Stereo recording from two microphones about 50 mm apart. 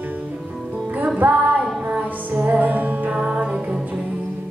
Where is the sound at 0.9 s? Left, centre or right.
Right.